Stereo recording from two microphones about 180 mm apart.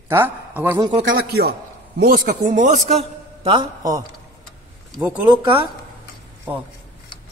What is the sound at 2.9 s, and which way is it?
A woman's voice, 30° right (ahead or behind).